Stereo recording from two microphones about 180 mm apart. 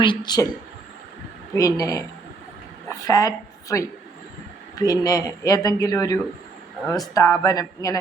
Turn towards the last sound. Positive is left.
turn(degrees=20)  # may be behind; listen again after turning